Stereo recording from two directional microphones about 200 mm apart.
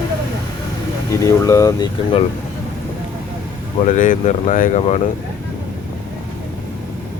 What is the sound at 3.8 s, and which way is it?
Speech, 40° left (ahead or behind).